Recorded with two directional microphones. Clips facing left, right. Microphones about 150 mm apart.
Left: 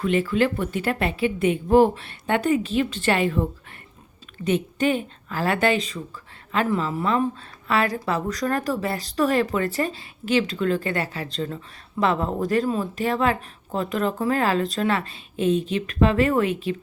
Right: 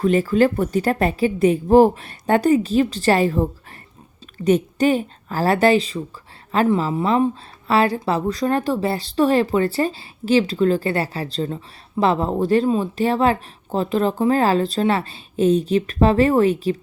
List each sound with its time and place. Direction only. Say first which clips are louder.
0.0 s speech: right 5 dB; 40° right (ahead or behind)